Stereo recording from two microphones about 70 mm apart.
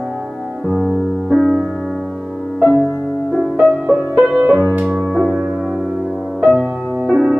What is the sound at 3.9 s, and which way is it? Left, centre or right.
Music, centre.